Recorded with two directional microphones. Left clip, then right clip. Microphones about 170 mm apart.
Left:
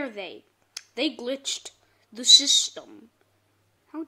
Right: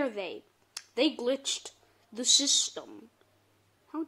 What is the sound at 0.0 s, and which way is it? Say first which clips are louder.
Speech: right 1 dB; 10° left (ahead or behind).